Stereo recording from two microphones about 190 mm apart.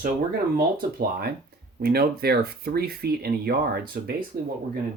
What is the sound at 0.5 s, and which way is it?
Speech, 50° right (ahead or behind).